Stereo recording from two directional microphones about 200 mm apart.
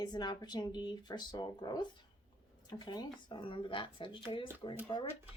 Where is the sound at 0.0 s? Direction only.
20° left (ahead or behind).